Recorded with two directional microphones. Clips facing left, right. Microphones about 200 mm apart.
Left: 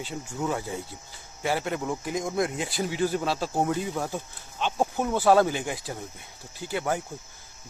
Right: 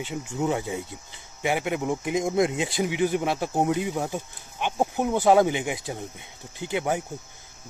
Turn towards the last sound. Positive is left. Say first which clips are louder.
# right 2 dB
turn(degrees=-20)  # may be behind; listen again after turning